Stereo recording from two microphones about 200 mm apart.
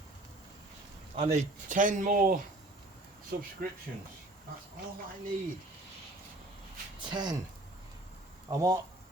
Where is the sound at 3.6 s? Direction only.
45° right (ahead or behind).